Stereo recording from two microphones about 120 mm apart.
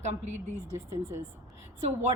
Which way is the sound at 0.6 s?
25° right (ahead or behind).